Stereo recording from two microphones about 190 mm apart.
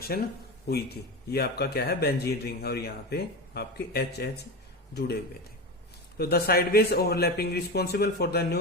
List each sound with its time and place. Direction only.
0.0 s speech: 55° left (ahead or behind)
6.1 s speech: 55° left (ahead or behind)